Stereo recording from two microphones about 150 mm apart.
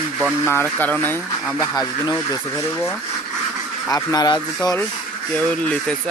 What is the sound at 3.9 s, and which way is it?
Speech, 25° left (ahead or behind).